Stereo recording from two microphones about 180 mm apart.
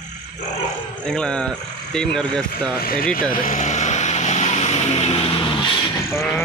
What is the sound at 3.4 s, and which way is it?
Vehicle, 40° left (ahead or behind).